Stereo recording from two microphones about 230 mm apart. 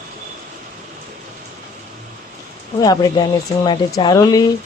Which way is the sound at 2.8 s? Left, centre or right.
Centre.